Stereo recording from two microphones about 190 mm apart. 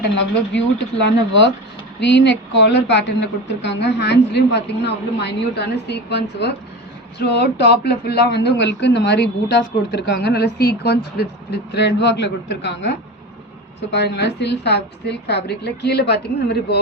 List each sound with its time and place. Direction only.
0.9 s speech: 70° left (ahead or behind)